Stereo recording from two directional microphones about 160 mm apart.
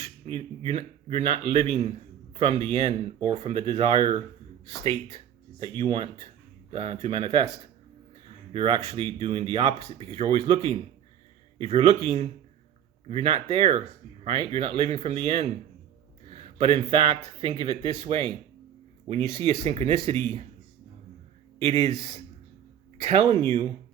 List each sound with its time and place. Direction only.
0.0 s speech: 35° right (ahead or behind)
8.5 s speech: 35° right (ahead or behind)
21.6 s speech: 40° right (ahead or behind)
23.3 s speech: 20° left (ahead or behind)